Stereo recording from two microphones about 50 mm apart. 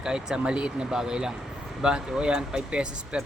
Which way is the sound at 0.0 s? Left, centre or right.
Centre.